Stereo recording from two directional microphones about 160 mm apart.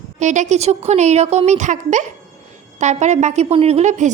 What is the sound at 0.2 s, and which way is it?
A woman's voice, 50° right (ahead or behind).